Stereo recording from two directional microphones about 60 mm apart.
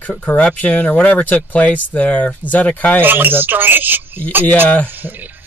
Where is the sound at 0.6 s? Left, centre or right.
Left.